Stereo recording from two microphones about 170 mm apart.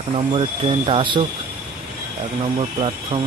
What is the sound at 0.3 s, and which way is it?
Speech, 35° right (ahead or behind).